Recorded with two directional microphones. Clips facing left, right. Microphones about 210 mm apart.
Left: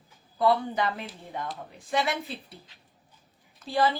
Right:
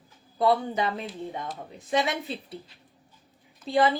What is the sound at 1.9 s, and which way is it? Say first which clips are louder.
Speech: right 2 dB; 20° right (ahead or behind).